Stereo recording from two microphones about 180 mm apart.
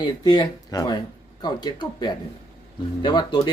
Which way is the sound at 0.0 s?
25° left (ahead or behind).